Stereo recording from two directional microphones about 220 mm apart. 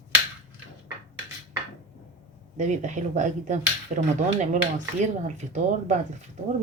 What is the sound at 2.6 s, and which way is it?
Speech, 35° right (ahead or behind).